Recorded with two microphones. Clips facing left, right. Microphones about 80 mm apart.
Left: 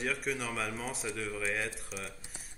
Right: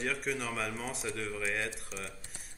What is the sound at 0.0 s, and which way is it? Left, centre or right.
Speech, centre.